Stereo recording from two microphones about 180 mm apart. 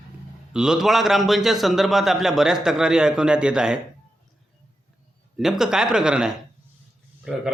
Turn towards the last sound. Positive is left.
turn(degrees=-5)  # may be behind; listen again after turning